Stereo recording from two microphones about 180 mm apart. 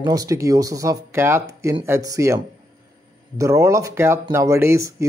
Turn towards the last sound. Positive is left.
turn(degrees=-15)  # may be behind; listen again after turning